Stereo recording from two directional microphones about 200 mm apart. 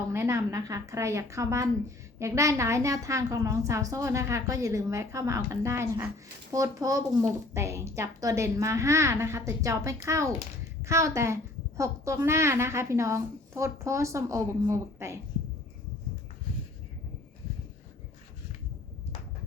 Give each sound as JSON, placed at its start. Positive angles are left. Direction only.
{"t": 0.1, "sound": "a woman's voice", "side_deg": -15}